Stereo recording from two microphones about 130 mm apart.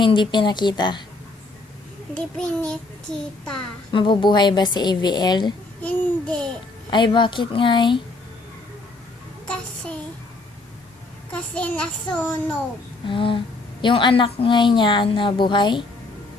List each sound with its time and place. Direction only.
0.0 s a woman's voice: 35° left (ahead or behind)
2.1 s a child's voice: 5° left (ahead or behind)
3.9 s a woman's voice: 35° left (ahead or behind)
5.8 s a child's voice: 5° left (ahead or behind)
6.9 s a woman's voice: 40° left (ahead or behind)
9.5 s a sound: 10° left (ahead or behind)
11.3 s a child's voice: 10° left (ahead or behind)
13.1 s a woman's voice: 40° left (ahead or behind)